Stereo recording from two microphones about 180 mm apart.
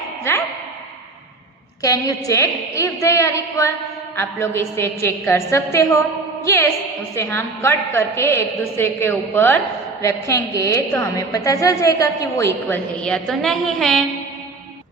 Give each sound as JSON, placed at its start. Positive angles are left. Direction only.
{"t": 1.8, "sound": "a woman's voice", "side_deg": 20}